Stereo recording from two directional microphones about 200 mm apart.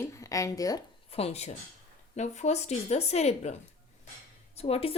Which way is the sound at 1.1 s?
30° left (ahead or behind).